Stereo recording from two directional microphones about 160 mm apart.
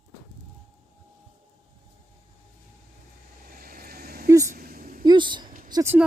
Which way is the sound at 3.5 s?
65° right (ahead or behind).